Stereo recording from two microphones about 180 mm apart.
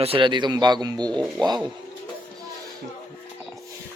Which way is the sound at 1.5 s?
25° right (ahead or behind).